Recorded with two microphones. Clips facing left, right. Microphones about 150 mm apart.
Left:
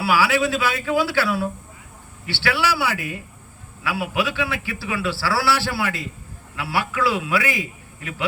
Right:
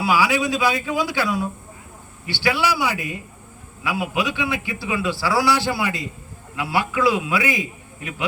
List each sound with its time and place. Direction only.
0.0 s a man's voice: 15° right (ahead or behind)